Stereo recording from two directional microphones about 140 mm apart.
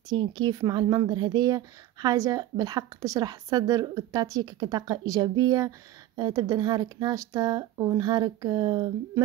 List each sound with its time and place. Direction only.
0.1 s speech: 30° right (ahead or behind)